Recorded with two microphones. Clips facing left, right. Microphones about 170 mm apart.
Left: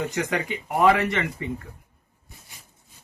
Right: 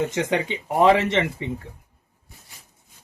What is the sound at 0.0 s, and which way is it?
Speech, 25° right (ahead or behind).